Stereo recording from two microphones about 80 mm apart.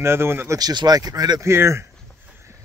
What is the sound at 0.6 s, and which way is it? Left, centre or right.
Speech, right.